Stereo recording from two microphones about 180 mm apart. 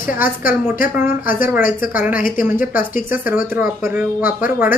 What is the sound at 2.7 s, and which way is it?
Speech, 50° left (ahead or behind).